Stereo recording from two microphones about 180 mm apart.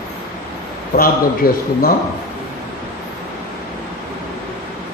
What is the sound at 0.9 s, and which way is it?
A man's voice, 55° left (ahead or behind).